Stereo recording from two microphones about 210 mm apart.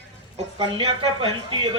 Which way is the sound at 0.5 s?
25° right (ahead or behind).